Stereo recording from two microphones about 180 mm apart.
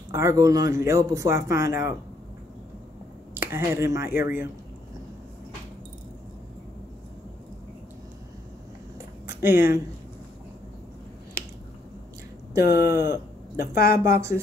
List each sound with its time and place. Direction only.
0.1 s speech: 15° right (ahead or behind)
3.3 s speech: 15° right (ahead or behind)
9.3 s speech: 15° right (ahead or behind)
12.7 s speech: 15° right (ahead or behind)
13.1 s speech: 60° left (ahead or behind)
13.9 s speech: 15° right (ahead or behind)